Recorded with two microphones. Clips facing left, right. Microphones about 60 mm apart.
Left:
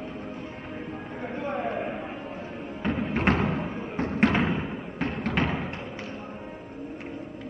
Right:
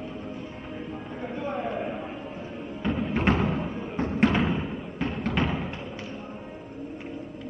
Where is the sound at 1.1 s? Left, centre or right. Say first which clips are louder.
Left 1 dB; left.